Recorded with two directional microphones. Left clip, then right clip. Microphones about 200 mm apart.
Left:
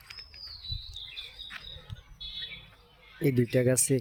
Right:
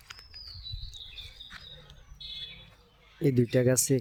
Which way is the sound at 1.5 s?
15° left (ahead or behind).